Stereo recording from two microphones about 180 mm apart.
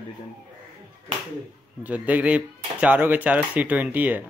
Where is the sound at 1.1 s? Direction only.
30° right (ahead or behind).